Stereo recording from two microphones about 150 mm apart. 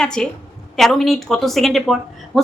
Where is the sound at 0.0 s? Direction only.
5° left (ahead or behind).